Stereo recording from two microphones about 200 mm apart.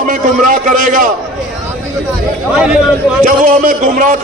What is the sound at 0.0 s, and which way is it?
A man's voice, 40° right (ahead or behind).